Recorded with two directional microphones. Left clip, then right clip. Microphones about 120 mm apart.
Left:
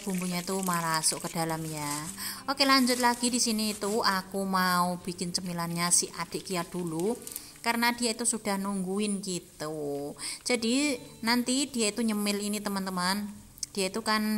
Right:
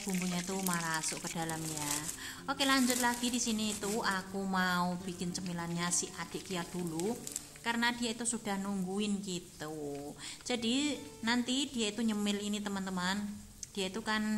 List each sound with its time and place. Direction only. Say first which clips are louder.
0.3 s a woman's voice: left 8 dB; 35° left (ahead or behind)
10.4 s a woman's voice: left 6 dB; 35° left (ahead or behind)